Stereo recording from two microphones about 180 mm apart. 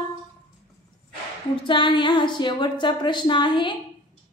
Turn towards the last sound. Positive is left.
turn(degrees=25)  # may be behind; listen again after turning